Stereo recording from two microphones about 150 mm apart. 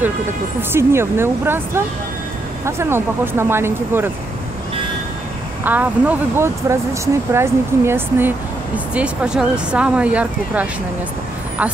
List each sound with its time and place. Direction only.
0.6 s speech: 15° right (ahead or behind)
5.6 s speech: 10° right (ahead or behind)